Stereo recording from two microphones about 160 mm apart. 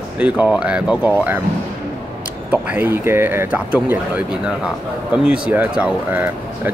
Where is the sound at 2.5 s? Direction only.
10° right (ahead or behind).